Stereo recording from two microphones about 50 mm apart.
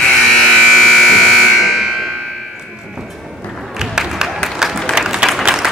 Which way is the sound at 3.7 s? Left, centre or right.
Centre.